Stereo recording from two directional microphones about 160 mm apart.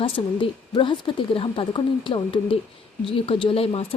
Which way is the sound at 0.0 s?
30° left (ahead or behind).